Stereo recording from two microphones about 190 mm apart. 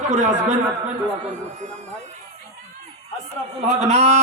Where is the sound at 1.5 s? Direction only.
40° right (ahead or behind).